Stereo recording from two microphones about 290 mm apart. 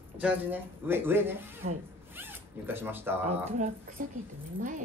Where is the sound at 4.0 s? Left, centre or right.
Right.